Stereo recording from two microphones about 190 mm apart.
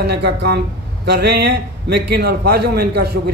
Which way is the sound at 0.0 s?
60° right (ahead or behind).